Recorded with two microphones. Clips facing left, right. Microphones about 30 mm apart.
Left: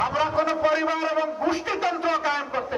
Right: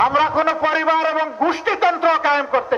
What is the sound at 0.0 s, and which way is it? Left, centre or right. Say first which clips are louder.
A man's voice: right 7 dB; right.